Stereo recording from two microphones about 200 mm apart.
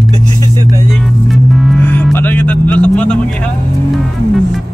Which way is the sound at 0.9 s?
Centre (ahead or behind).